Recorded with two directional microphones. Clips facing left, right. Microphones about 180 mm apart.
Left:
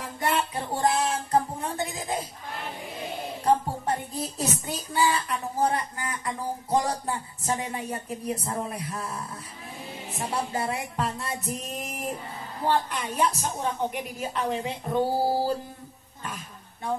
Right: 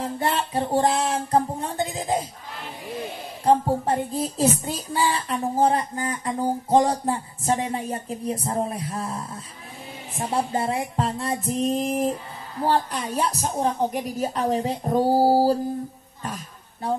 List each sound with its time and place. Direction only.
0.0 s music: 30° right (ahead or behind)
3.4 s a sound: 30° right (ahead or behind)
10.2 s a woman's voice: 30° right (ahead or behind)
12.6 s a woman's voice: 35° right (ahead or behind)
16.8 s a woman's voice: 35° right (ahead or behind)